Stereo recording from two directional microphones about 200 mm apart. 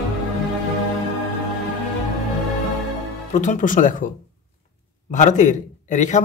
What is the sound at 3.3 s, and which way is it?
Speech, 40° left (ahead or behind).